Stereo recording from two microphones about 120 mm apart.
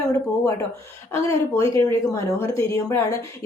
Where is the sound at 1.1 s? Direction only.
25° left (ahead or behind).